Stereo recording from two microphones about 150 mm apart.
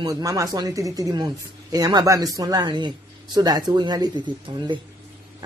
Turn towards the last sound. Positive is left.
turn(degrees=-30)  # may be behind; listen again after turning